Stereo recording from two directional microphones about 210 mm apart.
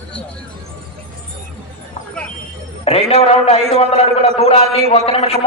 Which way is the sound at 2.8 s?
30° left (ahead or behind).